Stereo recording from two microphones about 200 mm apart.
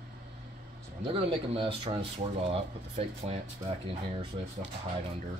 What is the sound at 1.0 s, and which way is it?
Speech, 30° right (ahead or behind).